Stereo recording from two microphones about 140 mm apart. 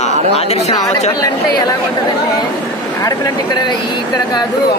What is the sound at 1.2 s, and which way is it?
Speech, 25° left (ahead or behind).